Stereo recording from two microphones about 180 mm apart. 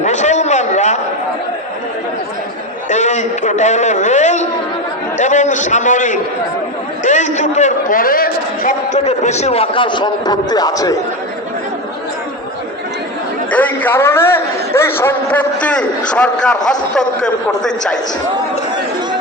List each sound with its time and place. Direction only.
0.0 s a sound: 40° left (ahead or behind)
2.9 s a man's voice: 40° left (ahead or behind); by 10.9 s 20° left (ahead or behind)
13.5 s a man's voice: 10° left (ahead or behind)